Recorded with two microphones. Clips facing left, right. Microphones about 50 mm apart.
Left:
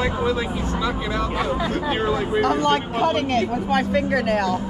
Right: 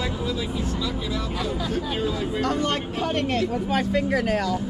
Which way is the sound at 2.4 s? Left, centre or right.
Centre.